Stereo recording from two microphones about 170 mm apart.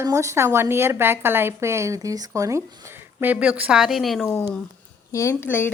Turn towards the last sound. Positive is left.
turn(degrees=10)  # may be behind; listen again after turning